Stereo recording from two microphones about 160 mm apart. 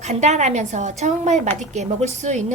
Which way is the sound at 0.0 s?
45° right (ahead or behind).